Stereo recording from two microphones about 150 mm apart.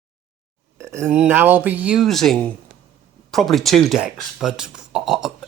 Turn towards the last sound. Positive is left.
turn(degrees=0)  # may be behind; listen again after turning